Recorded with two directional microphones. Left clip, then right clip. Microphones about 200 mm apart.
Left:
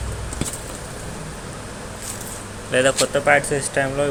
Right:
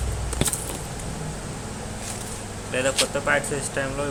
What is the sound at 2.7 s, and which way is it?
Speech, 20° left (ahead or behind).